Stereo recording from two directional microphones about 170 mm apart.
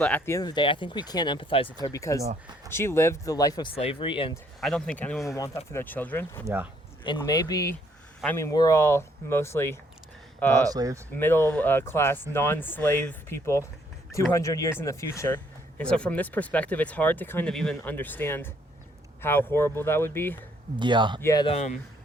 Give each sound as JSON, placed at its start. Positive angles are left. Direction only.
{"t": 0.0, "sound": "speech", "side_deg": 10}
{"t": 0.3, "sound": "speech", "side_deg": 25}
{"t": 1.8, "sound": "speech", "side_deg": 20}
{"t": 4.6, "sound": "speech", "side_deg": 5}
{"t": 6.4, "sound": "speech", "side_deg": -10}
{"t": 7.2, "sound": "speech", "side_deg": 20}
{"t": 10.7, "sound": "speech", "side_deg": -20}
{"t": 11.1, "sound": "speech", "side_deg": 10}
{"t": 15.8, "sound": "speech", "side_deg": 5}
{"t": 20.7, "sound": "speech", "side_deg": -25}
{"t": 21.2, "sound": "speech", "side_deg": 15}
{"t": 21.4, "sound": "speech", "side_deg": 40}